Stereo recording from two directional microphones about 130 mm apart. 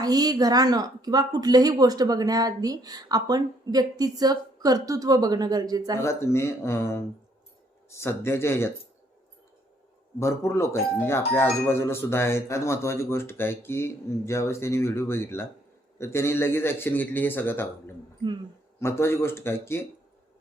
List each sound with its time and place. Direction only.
0.0 s a woman's voice: 30° right (ahead or behind)
6.0 s speech: 20° left (ahead or behind)
10.2 s a man's voice: 20° left (ahead or behind)
18.2 s speech: 40° right (ahead or behind)
18.8 s speech: 20° left (ahead or behind)